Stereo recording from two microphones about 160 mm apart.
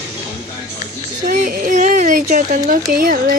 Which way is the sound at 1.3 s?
60° right (ahead or behind).